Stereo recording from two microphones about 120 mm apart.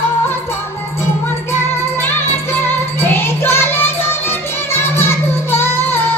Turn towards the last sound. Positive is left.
turn(degrees=20)  # may be behind; listen again after turning